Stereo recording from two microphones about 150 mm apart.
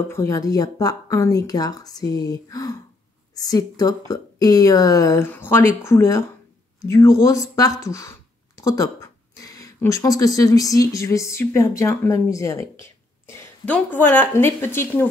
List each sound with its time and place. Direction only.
0.1 s speech: 20° left (ahead or behind)
13.3 s a sound: 15° left (ahead or behind)
13.7 s speech: 10° left (ahead or behind)